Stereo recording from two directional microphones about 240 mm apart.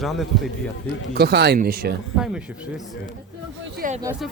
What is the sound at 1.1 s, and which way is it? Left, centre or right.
Speech, right.